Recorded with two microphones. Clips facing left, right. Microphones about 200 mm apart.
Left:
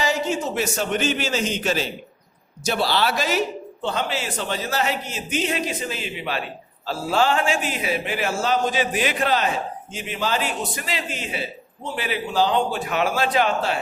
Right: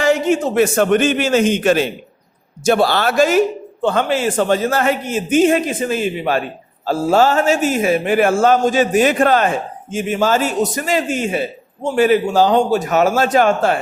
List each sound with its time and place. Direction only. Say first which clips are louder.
0.0 s a man's voice: right 8 dB; 55° right (ahead or behind)